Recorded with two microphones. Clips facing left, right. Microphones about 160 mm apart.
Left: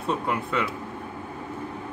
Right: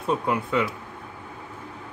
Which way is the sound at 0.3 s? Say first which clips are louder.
Right 4 dB; 10° right (ahead or behind).